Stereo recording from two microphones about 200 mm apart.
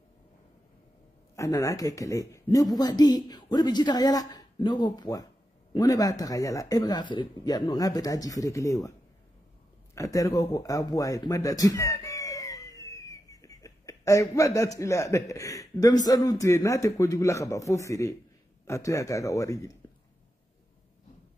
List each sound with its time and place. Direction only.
1.3 s speech: 15° left (ahead or behind)
9.9 s speech: 15° left (ahead or behind)